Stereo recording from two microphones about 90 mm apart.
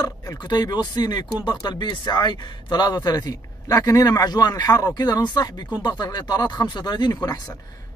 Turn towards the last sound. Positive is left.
turn(degrees=50)  # may be behind; listen again after turning